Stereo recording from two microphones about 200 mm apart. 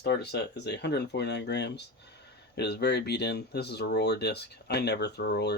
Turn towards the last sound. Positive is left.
turn(degrees=55)  # may be behind; listen again after turning